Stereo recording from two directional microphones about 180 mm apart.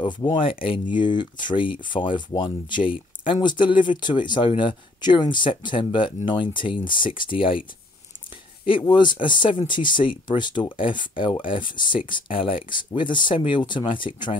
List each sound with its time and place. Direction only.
0.0 s speech: 25° left (ahead or behind)
8.6 s speech: 25° left (ahead or behind)